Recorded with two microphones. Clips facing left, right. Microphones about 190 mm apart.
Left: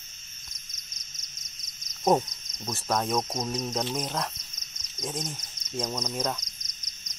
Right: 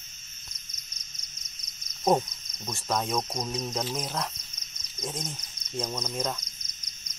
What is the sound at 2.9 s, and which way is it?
Cricket, centre (ahead or behind).